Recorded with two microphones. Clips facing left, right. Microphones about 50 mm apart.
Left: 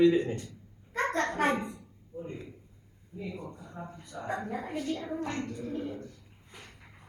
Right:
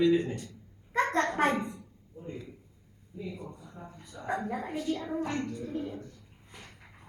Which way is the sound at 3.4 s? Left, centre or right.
Left.